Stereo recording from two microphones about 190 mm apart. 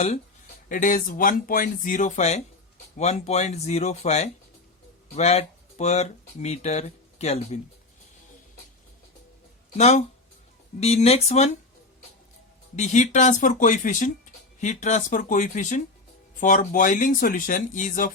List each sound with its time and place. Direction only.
0.7 s speech: 45° left (ahead or behind)
9.7 s speech: 35° left (ahead or behind)
12.7 s speech: 40° left (ahead or behind)